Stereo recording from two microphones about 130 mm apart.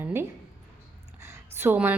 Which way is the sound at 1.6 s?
15° right (ahead or behind).